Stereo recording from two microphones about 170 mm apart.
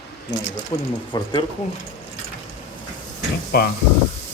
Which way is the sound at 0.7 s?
25° left (ahead or behind).